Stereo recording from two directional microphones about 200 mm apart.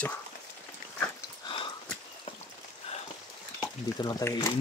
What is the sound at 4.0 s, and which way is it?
Speech, 20° left (ahead or behind).